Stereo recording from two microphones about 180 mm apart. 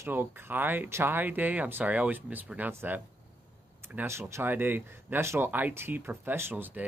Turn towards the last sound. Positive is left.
turn(degrees=-10)  # may be behind; listen again after turning